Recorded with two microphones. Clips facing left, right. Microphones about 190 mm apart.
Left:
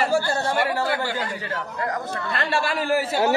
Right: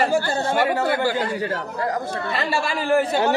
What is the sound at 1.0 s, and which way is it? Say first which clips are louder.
Speech: right 6 dB; 40° right (ahead or behind).